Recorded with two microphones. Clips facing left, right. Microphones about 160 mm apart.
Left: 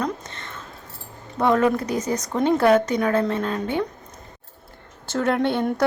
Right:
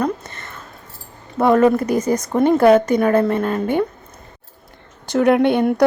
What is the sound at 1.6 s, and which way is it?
Speech, 55° right (ahead or behind).